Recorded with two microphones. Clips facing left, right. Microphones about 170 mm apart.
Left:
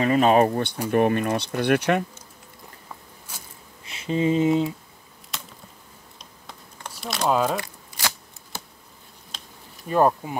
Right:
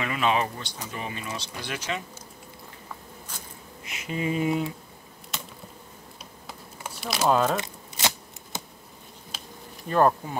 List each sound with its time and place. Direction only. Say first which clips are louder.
0.0 s speech: left 8 dB; 40° left (ahead or behind); by 2.0 s 60° left (ahead or behind)
3.8 s a sound: left 7 dB; 30° left (ahead or behind)
5.3 s insect: right 1 dB; centre (ahead or behind)
6.4 s a sound: right 1 dB; 5° right (ahead or behind)
7.5 s shuffling cards: even; 20° right (ahead or behind)
9.3 s insect: right 1 dB; 5° right (ahead or behind)
9.8 s bee: left 2 dB; 10° left (ahead or behind)